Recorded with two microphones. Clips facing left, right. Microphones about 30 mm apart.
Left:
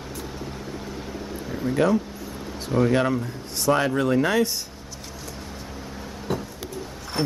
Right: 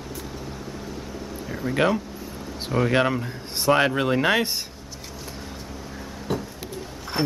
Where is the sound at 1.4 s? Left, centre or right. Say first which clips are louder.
Left 1 dB; centre.